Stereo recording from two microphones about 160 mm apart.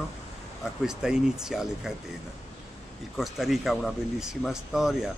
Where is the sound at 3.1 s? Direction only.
Centre (ahead or behind).